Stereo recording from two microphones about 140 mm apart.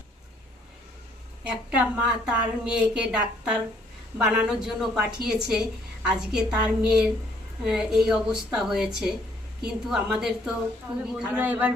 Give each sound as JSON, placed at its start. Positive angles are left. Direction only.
{"t": 1.5, "sound": "a woman's voice", "side_deg": -10}